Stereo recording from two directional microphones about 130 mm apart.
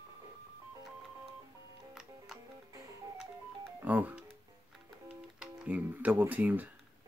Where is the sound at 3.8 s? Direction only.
15° right (ahead or behind).